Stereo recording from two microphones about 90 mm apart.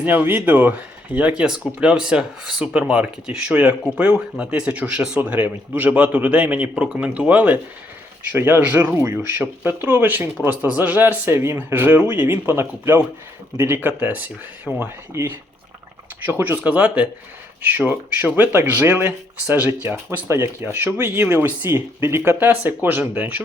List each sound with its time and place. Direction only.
0.0 s speech: 20° right (ahead or behind)